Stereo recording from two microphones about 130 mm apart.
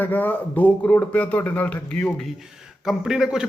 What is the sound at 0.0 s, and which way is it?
Speech, 15° left (ahead or behind).